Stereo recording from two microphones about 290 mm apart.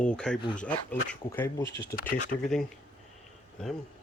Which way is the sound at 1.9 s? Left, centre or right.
Left.